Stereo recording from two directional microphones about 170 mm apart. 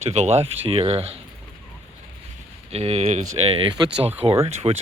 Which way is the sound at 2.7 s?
40° right (ahead or behind).